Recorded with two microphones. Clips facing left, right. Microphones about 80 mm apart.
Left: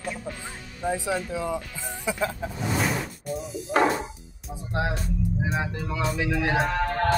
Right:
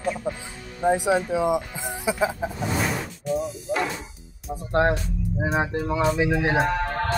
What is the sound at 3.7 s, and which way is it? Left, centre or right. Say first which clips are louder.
Speech: left 7 dB; left.